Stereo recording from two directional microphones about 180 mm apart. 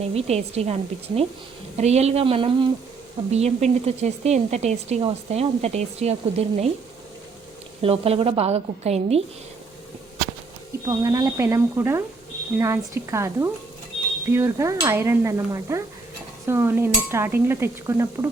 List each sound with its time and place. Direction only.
0.1 s speech: 35° right (ahead or behind)
7.8 s speech: 35° right (ahead or behind)
10.8 s stir: 20° right (ahead or behind)